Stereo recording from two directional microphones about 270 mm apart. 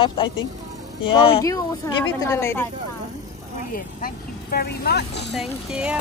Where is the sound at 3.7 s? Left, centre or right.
Left.